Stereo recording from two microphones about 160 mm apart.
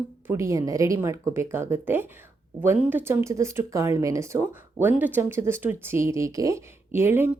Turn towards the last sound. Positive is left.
turn(degrees=-15)  # may be behind; listen again after turning